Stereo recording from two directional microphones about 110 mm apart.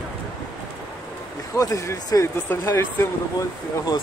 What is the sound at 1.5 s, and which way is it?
Speech, 30° left (ahead or behind).